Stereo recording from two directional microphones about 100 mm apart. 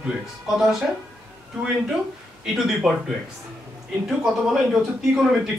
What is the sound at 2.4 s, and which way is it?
Speech, 5° right (ahead or behind).